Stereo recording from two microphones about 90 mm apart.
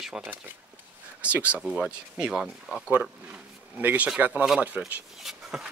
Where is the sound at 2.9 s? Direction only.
15° right (ahead or behind).